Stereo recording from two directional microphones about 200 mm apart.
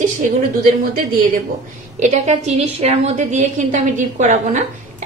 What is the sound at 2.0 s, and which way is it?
A woman's voice, 35° right (ahead or behind).